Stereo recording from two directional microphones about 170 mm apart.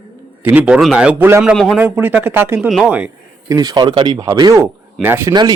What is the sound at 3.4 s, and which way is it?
Speech, 20° right (ahead or behind).